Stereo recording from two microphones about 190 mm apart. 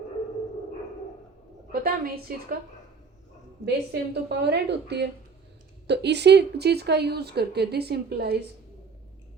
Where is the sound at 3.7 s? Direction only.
60° right (ahead or behind).